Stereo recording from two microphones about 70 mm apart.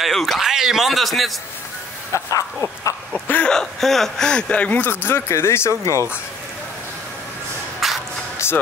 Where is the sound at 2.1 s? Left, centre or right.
Left.